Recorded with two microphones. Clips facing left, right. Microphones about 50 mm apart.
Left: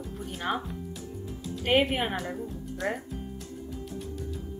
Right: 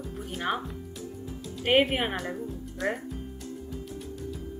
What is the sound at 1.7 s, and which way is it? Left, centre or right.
Speech, centre.